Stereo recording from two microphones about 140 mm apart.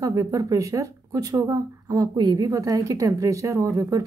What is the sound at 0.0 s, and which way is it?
A woman's voice, 25° right (ahead or behind).